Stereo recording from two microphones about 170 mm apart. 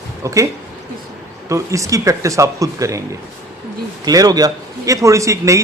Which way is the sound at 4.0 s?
20° right (ahead or behind).